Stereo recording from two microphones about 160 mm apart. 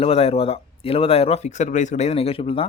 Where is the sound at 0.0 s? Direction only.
35° left (ahead or behind).